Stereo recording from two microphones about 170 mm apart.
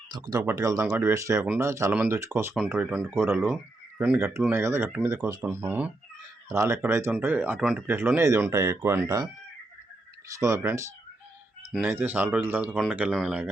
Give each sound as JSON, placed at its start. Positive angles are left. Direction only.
{"t": 0.3, "sound": "speech", "side_deg": -20}
{"t": 10.3, "sound": "speech", "side_deg": -20}
{"t": 11.7, "sound": "speech", "side_deg": 0}